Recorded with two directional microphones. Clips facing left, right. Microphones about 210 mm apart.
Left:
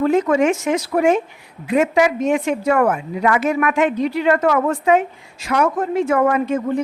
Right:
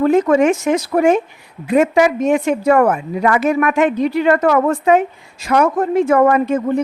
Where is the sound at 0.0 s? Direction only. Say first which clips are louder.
Right 3 dB; 40° right (ahead or behind).